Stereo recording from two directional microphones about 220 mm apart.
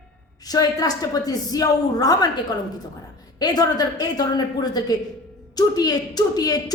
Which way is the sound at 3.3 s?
20° left (ahead or behind).